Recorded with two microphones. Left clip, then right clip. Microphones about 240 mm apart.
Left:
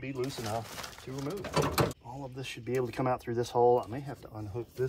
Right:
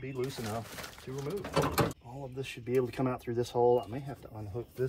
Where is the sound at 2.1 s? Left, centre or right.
Centre.